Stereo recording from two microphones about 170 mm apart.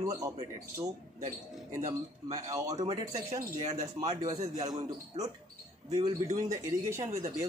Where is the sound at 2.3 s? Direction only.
20° right (ahead or behind).